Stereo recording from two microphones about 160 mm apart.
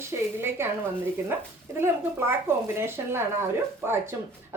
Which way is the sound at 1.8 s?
15° right (ahead or behind).